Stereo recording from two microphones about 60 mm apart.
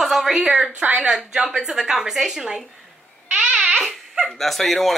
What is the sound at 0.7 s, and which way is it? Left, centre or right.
Speech, right.